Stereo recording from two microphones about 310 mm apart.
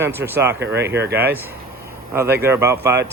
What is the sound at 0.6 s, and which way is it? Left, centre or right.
Speech, right.